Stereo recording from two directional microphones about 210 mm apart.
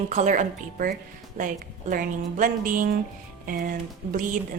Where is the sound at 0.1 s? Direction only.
35° right (ahead or behind).